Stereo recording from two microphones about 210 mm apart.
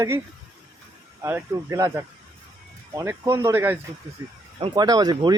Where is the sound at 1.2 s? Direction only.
15° right (ahead or behind).